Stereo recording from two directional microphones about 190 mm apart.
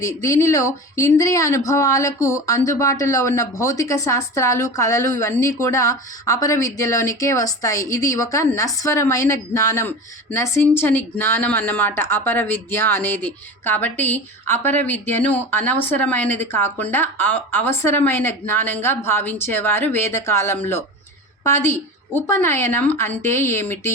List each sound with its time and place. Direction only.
0.0 s speech: 15° left (ahead or behind)